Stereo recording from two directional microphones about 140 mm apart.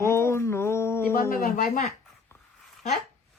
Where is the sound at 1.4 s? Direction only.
85° left.